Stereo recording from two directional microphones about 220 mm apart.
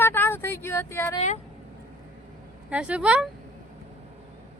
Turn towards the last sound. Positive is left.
turn(degrees=-5)  # may be behind; listen again after turning